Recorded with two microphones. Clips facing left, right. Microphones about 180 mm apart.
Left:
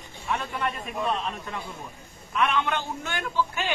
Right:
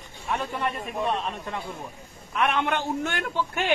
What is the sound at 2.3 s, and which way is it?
Speech, 55° right (ahead or behind).